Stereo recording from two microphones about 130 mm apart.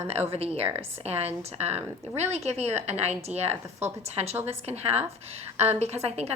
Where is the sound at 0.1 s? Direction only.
50° right (ahead or behind).